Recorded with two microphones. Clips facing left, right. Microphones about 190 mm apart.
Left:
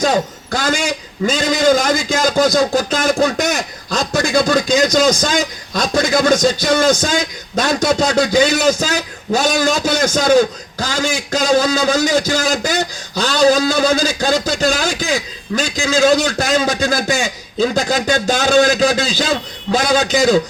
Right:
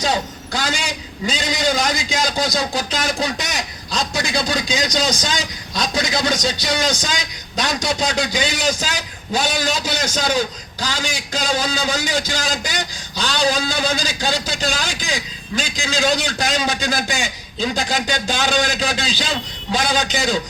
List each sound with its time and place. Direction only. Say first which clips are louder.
0.0 s a man's voice: left 6 dB; 50° left (ahead or behind)